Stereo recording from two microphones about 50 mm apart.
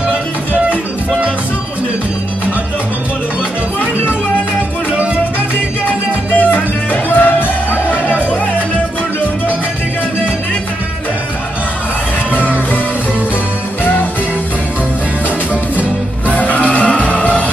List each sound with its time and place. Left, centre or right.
4.9 s music: right
6.3 s music: left
12.3 s music: left
16.3 s music: left